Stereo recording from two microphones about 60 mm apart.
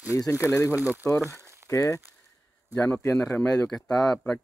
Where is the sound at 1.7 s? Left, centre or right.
Left.